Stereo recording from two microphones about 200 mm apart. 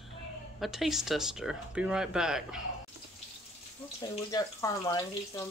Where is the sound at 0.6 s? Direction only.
Centre (ahead or behind).